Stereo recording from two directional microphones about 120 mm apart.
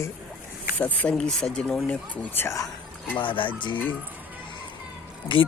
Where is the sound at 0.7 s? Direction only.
15° left (ahead or behind).